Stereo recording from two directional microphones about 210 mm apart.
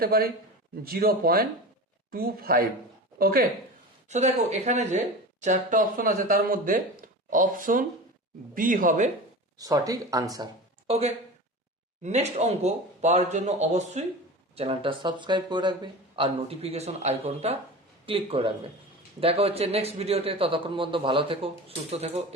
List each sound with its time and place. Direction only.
0.0 s speech: 45° right (ahead or behind)
4.1 s speech: 35° right (ahead or behind)
9.6 s speech: 15° right (ahead or behind)